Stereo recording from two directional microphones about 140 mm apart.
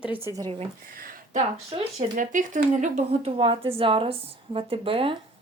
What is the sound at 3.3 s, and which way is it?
Speech, 40° right (ahead or behind).